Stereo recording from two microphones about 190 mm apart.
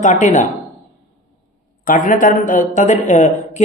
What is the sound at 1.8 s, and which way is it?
A man's voice, 45° left (ahead or behind).